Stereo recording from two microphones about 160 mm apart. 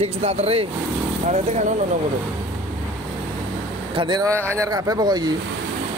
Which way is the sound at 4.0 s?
25° right (ahead or behind).